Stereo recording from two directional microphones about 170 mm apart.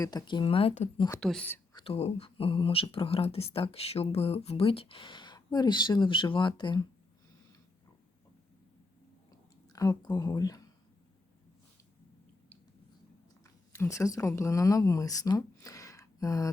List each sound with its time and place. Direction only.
0.0 s speech: 25° left (ahead or behind); by 0.9 s 40° left (ahead or behind)
0.9 s speech: 25° left (ahead or behind)
1.2 s speech: 5° left (ahead or behind)
1.7 s speech: 30° left (ahead or behind)
9.7 s speech: 20° left (ahead or behind)
13.4 s speech: 15° left (ahead or behind)